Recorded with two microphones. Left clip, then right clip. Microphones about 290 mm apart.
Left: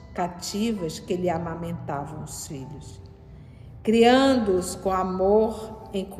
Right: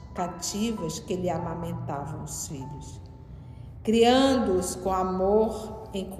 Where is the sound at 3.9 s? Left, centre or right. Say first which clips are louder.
Left 3 dB; left.